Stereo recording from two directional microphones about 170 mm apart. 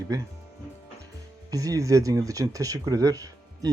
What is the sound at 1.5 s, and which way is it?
Speech, 20° right (ahead or behind).